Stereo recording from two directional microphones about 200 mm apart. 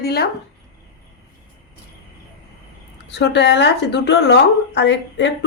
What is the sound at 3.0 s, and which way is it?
Speech, 60° left (ahead or behind).